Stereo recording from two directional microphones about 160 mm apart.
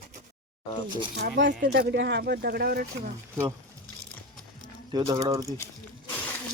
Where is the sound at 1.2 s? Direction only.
90° right; by 2.8 s 75° right (ahead or behind).